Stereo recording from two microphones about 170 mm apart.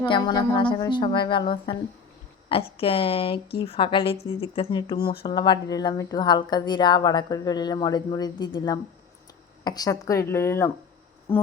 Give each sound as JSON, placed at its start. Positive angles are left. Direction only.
{"t": 0.0, "sound": "a woman's voice", "side_deg": 30}